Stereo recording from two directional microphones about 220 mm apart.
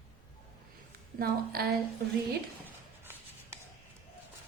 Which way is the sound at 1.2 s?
45° right (ahead or behind).